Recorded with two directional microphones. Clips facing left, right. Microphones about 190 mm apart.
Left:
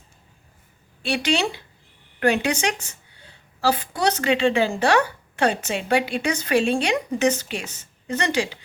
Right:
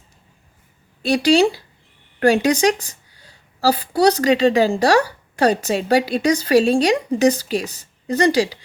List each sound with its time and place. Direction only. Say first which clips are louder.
1.0 s a woman's voice: right 8 dB; 35° right (ahead or behind)